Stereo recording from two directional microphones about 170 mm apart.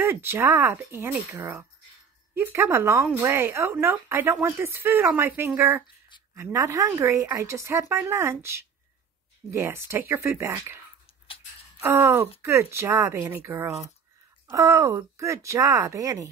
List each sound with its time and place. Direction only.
0.0 s speech: 15° right (ahead or behind)
11.2 s a sound: 35° left (ahead or behind)
11.8 s speech: 15° right (ahead or behind)